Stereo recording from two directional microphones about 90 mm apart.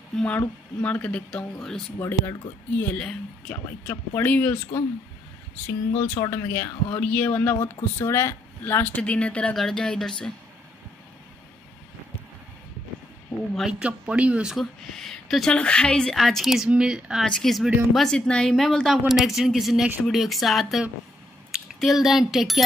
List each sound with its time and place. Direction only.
0.1 s speech: 5° left (ahead or behind)
2.0 s speech: 25° left (ahead or behind); by 3.9 s 10° left (ahead or behind)
3.9 s speech: 20° left (ahead or behind)
5.7 s speech: 20° left (ahead or behind)
7.5 s speech: 30° left (ahead or behind); by 10.1 s 5° left (ahead or behind)
13.7 s speech: 10° right (ahead or behind)
14.6 s speech: 5° left (ahead or behind)
17.2 s speech: 5° left (ahead or behind)